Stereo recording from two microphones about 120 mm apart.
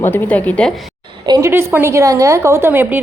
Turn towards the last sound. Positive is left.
turn(degrees=-15)  # may be behind; listen again after turning